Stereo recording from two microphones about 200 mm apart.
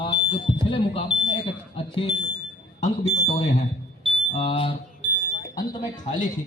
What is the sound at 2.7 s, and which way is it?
Speech, 35° left (ahead or behind).